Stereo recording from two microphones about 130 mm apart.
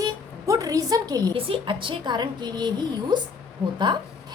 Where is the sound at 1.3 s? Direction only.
40° right (ahead or behind).